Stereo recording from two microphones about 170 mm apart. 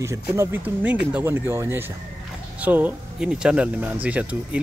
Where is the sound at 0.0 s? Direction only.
15° right (ahead or behind).